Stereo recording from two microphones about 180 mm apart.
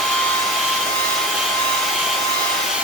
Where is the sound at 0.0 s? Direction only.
Centre (ahead or behind).